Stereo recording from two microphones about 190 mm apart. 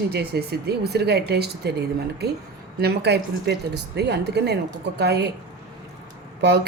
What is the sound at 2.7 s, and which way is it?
Speech, 60° right (ahead or behind).